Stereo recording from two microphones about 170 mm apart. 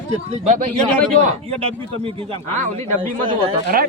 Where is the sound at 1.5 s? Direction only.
35° right (ahead or behind).